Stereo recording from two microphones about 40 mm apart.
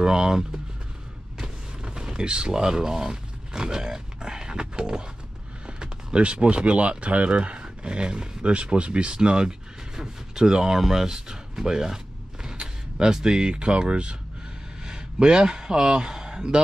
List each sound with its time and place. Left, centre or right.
0.0 s speech: centre